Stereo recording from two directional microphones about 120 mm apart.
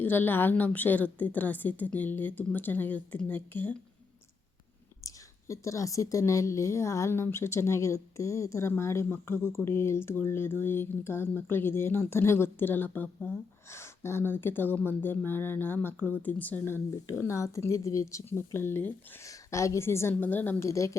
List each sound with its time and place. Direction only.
0.0 s a woman's voice: 15° left (ahead or behind)
5.0 s speech: 25° left (ahead or behind)